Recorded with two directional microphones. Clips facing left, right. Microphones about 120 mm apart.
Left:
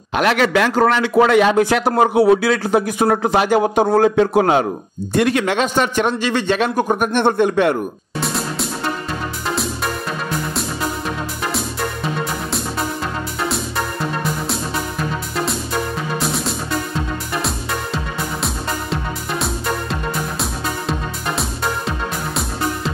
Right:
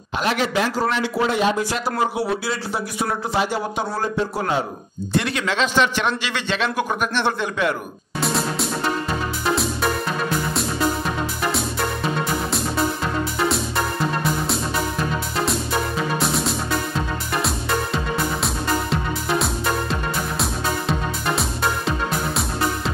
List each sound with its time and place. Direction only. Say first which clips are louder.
0.1 s a man's voice: left 6 dB; 70° left (ahead or behind); by 4.0 s 50° left (ahead or behind)
4.0 s a man's voice: left 10 dB; 65° left (ahead or behind)
5.1 s speech: left 6 dB; 50° left (ahead or behind)
8.2 s music: even; centre (ahead or behind)
16.2 s music: even; centre (ahead or behind)